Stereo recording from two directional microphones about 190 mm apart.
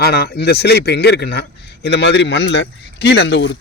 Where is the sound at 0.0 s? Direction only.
55° left (ahead or behind).